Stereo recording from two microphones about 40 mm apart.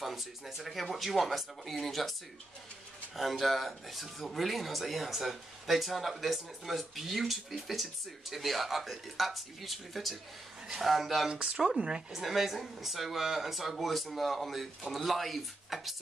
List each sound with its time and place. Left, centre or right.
0.0 s speech: centre
3.2 s speech: centre
11.2 s speech: centre
12.1 s speech: centre